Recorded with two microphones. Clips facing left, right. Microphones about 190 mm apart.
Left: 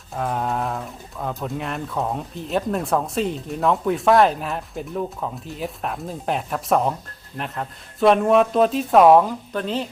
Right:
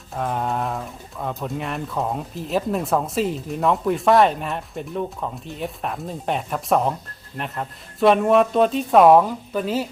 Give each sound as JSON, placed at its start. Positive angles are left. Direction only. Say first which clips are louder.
{"t": 0.2, "sound": "speech", "louder": "even", "side_deg": 0}